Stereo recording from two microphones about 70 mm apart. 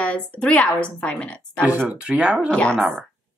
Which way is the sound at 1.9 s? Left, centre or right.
Centre.